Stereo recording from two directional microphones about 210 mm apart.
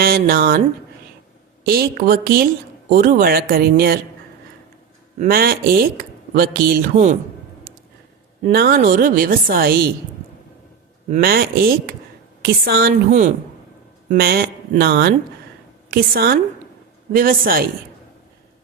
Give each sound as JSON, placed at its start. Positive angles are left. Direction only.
{"t": 0.0, "sound": "speech", "side_deg": -45}
{"t": 1.6, "sound": "speech", "side_deg": -45}
{"t": 5.2, "sound": "speech", "side_deg": -45}
{"t": 8.4, "sound": "speech", "side_deg": -45}
{"t": 11.1, "sound": "speech", "side_deg": -45}